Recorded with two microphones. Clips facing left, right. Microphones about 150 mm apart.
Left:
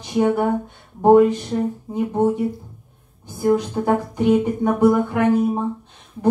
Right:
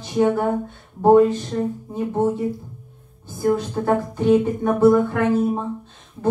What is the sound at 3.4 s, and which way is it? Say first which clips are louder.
Speech: left 2 dB; 15° left (ahead or behind).